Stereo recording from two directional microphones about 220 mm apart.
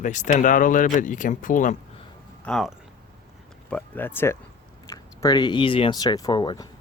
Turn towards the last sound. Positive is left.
turn(degrees=20)  # may be behind; listen again after turning